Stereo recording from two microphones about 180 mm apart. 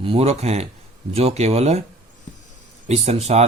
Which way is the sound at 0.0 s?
35° right (ahead or behind).